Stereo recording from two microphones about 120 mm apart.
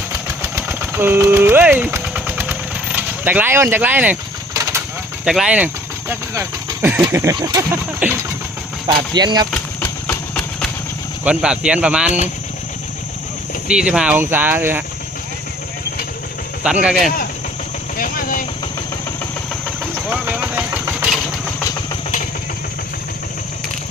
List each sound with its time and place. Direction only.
0.4 s vehicle: 20° right (ahead or behind)
4.5 s vehicle: 25° right (ahead or behind)
5.2 s speech: 5° right (ahead or behind)
7.1 s a sound: 25° right (ahead or behind)
7.3 s speech: 35° right (ahead or behind)
7.7 s speech: 15° right (ahead or behind)
9.1 s speech: 35° right (ahead or behind)
9.5 s a sound: 15° left (ahead or behind)
11.2 s speech: 10° right (ahead or behind)
13.7 s speech: 10° right (ahead or behind)
16.6 s speech: 10° right (ahead or behind)
20.1 s vehicle: 10° right (ahead or behind)